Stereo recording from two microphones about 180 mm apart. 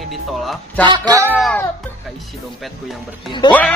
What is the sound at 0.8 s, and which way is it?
Speech, 25° right (ahead or behind).